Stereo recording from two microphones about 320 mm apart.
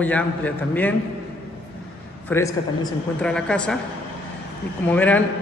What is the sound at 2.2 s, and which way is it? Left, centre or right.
A man's voice, centre.